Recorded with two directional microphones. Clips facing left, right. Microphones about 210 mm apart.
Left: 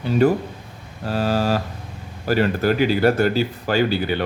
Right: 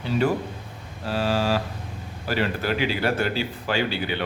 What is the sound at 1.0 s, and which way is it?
A man's voice, 45° left (ahead or behind).